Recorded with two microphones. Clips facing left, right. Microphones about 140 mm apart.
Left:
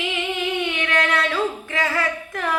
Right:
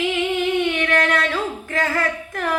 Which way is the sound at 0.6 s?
50° right (ahead or behind).